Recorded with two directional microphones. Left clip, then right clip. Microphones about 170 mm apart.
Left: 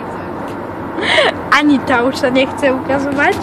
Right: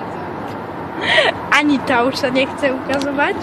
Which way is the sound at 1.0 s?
10° left (ahead or behind).